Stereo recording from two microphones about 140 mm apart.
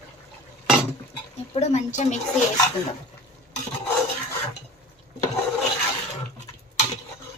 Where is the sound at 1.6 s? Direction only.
55° left (ahead or behind).